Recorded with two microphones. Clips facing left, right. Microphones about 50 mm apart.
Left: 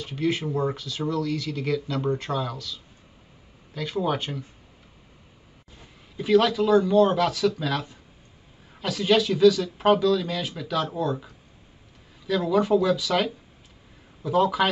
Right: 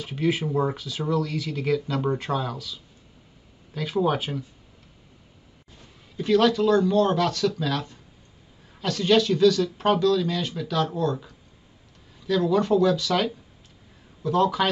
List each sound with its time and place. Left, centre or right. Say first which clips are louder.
0.0 s speech: right 1 dB; centre
5.8 s speech: right 1 dB; centre